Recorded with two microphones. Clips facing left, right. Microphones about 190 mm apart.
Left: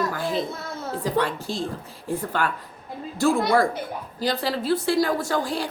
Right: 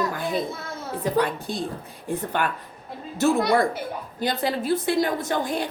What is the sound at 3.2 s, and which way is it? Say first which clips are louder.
A woman's voice: even; 20° right (ahead or behind).